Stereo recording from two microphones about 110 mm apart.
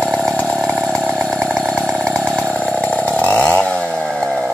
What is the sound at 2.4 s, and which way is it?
Chainsaw, 10° left (ahead or behind).